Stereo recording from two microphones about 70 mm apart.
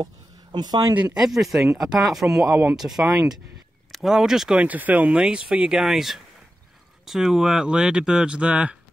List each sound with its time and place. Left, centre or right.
0.0 s a sound: right
1.1 s speech: centre
4.6 s speech: right